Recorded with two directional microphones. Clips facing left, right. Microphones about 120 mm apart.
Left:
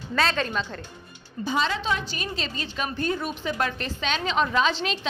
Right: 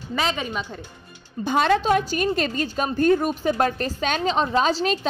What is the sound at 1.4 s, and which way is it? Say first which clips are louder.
A woman's voice: right 6 dB; 55° right (ahead or behind).